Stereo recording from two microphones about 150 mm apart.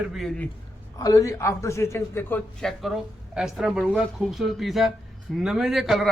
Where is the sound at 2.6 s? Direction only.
Centre (ahead or behind).